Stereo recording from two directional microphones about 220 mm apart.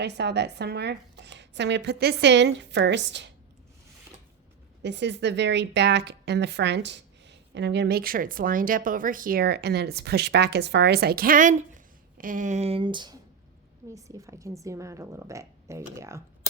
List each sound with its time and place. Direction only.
0.0 s a woman's voice: 50° right (ahead or behind)
4.8 s a woman's voice: 50° right (ahead or behind); by 16.2 s 15° right (ahead or behind)